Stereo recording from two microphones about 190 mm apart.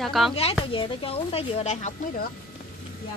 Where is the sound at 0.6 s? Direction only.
25° left (ahead or behind); by 2.3 s 45° left (ahead or behind).